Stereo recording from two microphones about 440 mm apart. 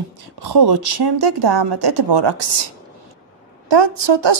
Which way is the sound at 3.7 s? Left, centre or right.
Right.